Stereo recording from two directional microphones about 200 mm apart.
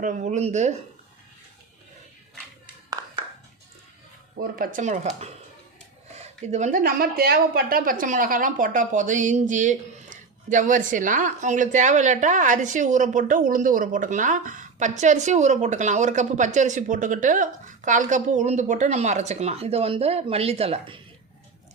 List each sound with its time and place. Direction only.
0.0 s a woman's voice: 40° right (ahead or behind)
4.5 s a woman's voice: 45° right (ahead or behind); by 21.0 s 25° right (ahead or behind)